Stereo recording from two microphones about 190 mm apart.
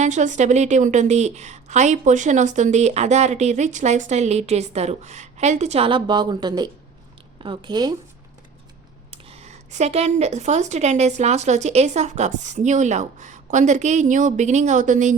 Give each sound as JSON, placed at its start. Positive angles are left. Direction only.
{"t": 0.0, "sound": "a woman's voice", "side_deg": -40}
{"t": 9.0, "sound": "a woman's voice", "side_deg": -35}